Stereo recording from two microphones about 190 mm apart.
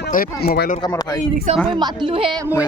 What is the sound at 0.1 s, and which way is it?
Speech, 50° left (ahead or behind).